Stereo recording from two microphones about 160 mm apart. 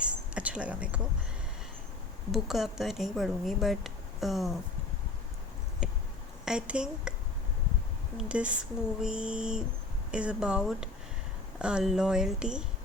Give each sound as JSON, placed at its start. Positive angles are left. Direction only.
{"t": 0.0, "sound": "a sound", "side_deg": -5}
{"t": 2.3, "sound": "speech", "side_deg": 0}
{"t": 6.4, "sound": "speech", "side_deg": -5}
{"t": 8.2, "sound": "speech", "side_deg": -5}